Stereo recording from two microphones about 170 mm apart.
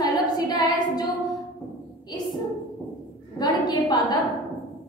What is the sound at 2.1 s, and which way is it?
Bow-wow, 25° left (ahead or behind).